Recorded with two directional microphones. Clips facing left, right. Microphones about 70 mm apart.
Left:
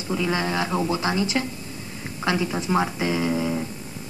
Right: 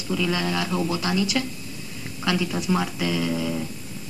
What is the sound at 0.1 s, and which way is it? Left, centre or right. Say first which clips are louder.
Speech: even; left.